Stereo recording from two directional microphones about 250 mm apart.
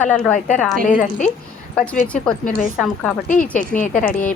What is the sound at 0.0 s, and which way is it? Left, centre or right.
Speech, centre.